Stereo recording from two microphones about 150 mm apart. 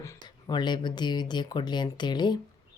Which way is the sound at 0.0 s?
25° left (ahead or behind).